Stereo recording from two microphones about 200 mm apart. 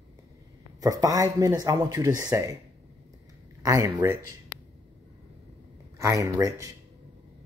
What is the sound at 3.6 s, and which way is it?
Speech, 15° right (ahead or behind).